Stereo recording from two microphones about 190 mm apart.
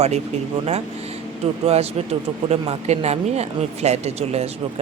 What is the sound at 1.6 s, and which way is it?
Speech, 30° right (ahead or behind).